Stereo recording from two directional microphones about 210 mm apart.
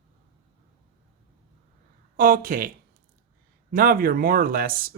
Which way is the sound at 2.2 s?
45° right (ahead or behind).